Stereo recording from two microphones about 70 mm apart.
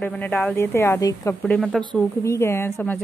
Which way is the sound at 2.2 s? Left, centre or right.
Left.